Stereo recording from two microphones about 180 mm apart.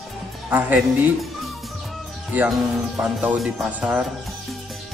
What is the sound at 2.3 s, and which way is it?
Speech, 5° right (ahead or behind).